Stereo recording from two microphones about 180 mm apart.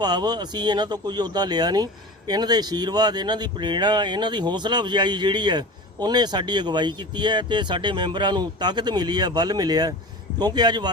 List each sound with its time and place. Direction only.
0.0 s speech: 25° right (ahead or behind)